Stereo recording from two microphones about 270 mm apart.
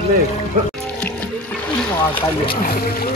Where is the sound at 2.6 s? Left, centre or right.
Left.